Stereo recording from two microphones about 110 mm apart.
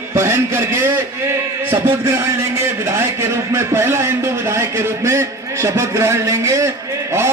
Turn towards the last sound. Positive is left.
turn(degrees=-25)  # may be behind; listen again after turning